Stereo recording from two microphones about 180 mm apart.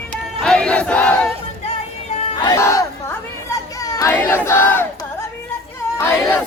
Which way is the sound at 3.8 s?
20° left (ahead or behind).